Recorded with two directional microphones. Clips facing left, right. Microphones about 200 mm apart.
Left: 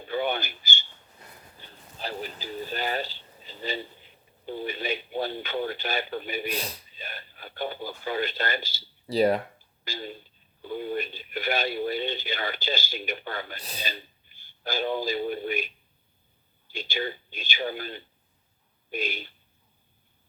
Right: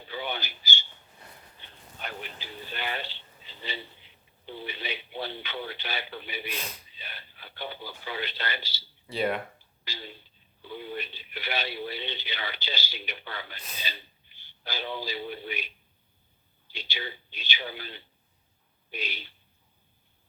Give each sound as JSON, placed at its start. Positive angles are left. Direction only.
{"t": 0.1, "sound": "a sound", "side_deg": 50}
{"t": 1.5, "sound": "speech", "side_deg": 35}
{"t": 9.8, "sound": "a man's voice", "side_deg": 45}